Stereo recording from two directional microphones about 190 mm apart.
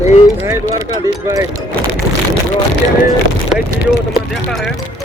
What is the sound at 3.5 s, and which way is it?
Speech, 5° right (ahead or behind).